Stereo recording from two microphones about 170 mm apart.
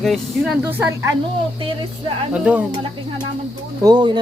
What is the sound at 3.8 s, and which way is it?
Speech, 25° right (ahead or behind).